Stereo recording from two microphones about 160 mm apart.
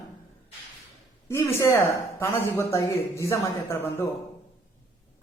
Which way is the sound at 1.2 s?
15° left (ahead or behind).